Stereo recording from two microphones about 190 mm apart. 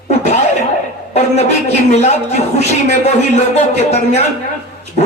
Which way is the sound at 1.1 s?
35° left (ahead or behind).